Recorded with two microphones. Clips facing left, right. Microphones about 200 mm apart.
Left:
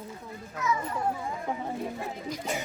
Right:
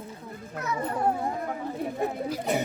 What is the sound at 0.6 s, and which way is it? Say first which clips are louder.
Speech: even; 60° right (ahead or behind).